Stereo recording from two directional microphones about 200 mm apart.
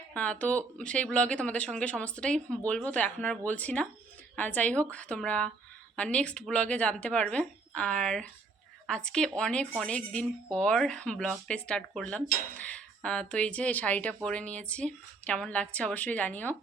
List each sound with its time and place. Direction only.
0.1 s speech: 5° left (ahead or behind)